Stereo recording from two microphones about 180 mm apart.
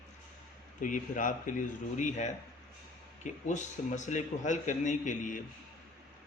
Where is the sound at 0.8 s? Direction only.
50° left (ahead or behind).